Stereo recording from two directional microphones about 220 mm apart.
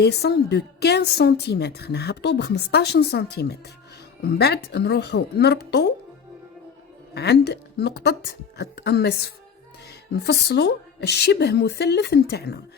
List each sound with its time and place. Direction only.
0.0 s a woman's voice: 50° left (ahead or behind)
7.1 s a woman's voice: 45° left (ahead or behind)